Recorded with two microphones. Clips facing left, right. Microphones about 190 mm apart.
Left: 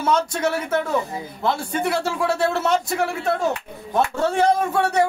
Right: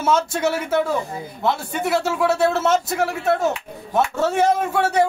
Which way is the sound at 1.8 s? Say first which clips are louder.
Right 4 dB; centre (ahead or behind).